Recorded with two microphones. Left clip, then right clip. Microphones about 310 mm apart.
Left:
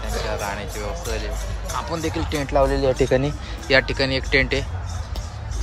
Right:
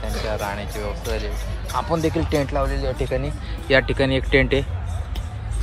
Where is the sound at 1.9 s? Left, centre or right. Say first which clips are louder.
Right 5 dB; centre.